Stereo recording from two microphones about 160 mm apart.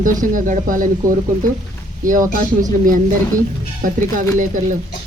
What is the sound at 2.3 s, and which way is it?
Speech, 60° right (ahead or behind).